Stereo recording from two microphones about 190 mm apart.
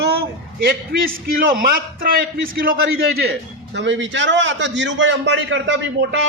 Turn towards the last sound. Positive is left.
turn(degrees=-70)  # may be behind; listen again after turning